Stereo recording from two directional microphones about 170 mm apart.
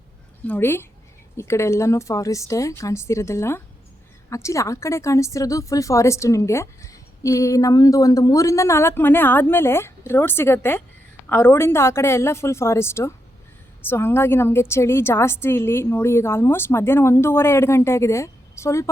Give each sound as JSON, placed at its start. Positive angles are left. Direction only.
{"t": 0.4, "sound": "a woman's voice", "side_deg": 10}